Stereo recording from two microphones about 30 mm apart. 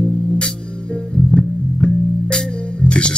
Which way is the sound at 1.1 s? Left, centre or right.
Left.